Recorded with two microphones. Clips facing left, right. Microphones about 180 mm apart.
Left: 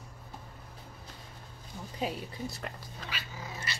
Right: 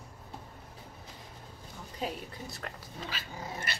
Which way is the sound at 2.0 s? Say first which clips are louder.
Left 2 dB; centre (ahead or behind).